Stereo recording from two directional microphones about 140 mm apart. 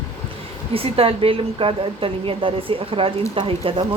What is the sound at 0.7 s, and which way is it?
A woman's voice, 45° right (ahead or behind).